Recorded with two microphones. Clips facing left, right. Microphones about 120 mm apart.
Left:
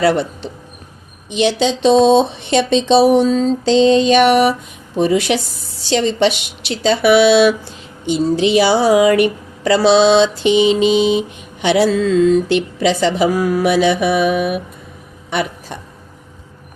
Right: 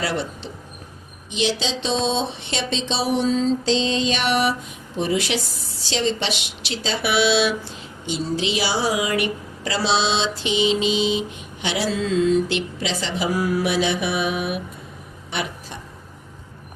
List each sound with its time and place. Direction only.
0.0 s speech: 55° left (ahead or behind)
1.3 s mantra: 55° left (ahead or behind)